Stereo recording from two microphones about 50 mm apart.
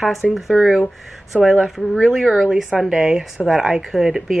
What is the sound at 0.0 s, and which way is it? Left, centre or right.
A woman's voice, centre.